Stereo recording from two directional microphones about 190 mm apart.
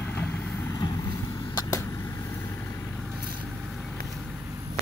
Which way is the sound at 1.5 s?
20° left (ahead or behind).